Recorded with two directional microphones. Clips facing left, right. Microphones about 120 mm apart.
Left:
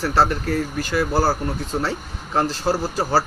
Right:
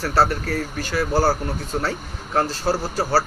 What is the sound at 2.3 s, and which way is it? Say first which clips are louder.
Speech: left 1 dB; 15° left (ahead or behind).